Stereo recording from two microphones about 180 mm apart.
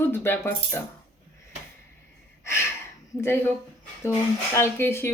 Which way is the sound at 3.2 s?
15° left (ahead or behind).